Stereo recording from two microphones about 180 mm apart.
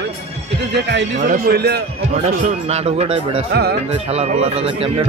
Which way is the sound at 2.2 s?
40° right (ahead or behind).